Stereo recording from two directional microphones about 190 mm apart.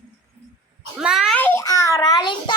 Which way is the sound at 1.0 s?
5° right (ahead or behind).